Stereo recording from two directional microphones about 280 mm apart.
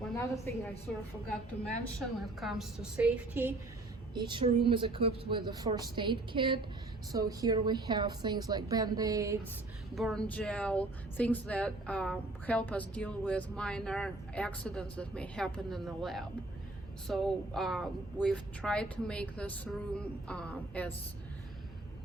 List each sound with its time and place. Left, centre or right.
0.0 s a woman's voice: centre
2.2 s a woman's voice: centre
9.9 s speech: centre